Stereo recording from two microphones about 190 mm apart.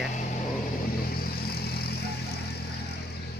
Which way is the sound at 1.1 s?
55° left (ahead or behind).